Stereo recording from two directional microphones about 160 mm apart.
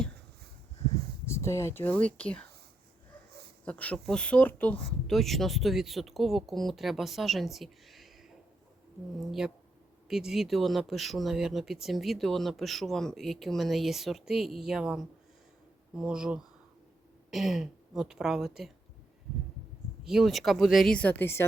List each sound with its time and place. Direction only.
1.3 s speech: 15° left (ahead or behind)
3.7 s speech: 10° left (ahead or behind)
9.1 s speech: centre (ahead or behind)
20.1 s speech: centre (ahead or behind)